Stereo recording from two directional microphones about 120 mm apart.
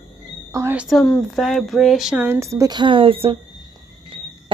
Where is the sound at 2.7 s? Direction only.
45° right (ahead or behind).